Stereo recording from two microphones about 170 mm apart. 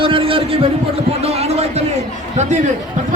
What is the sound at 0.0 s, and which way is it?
Speech, 30° right (ahead or behind).